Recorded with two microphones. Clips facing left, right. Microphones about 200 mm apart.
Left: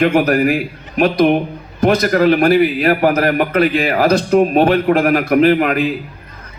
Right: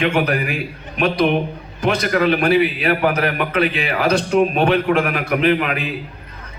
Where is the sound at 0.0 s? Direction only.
45° left (ahead or behind).